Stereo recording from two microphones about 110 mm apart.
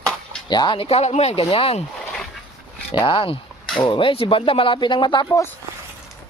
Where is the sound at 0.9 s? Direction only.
80° left.